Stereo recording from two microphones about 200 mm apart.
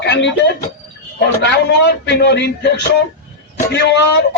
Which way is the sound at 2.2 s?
60° left (ahead or behind).